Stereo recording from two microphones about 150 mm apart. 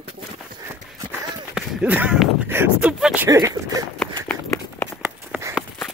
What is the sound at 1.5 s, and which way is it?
Speech, 5° right (ahead or behind).